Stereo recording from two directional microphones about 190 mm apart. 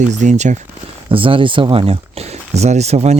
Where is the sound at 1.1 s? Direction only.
30° right (ahead or behind).